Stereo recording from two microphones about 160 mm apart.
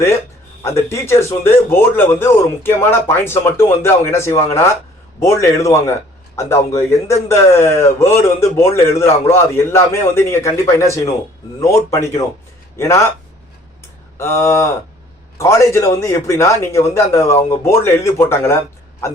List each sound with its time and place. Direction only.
0.8 s a man's voice: 15° left (ahead or behind)
14.2 s a man's voice: 15° left (ahead or behind)